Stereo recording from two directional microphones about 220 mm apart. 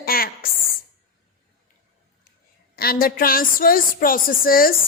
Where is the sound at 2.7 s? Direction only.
45° left (ahead or behind).